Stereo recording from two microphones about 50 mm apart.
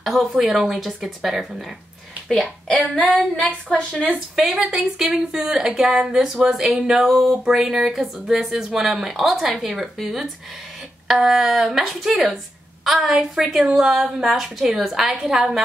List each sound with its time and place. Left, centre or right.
0.0 s a woman's voice: centre
2.7 s a woman's voice: left
4.1 s a woman's voice: centre
8.5 s a woman's voice: centre